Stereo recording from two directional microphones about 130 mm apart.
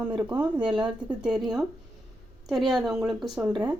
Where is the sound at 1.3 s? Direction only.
5° right (ahead or behind).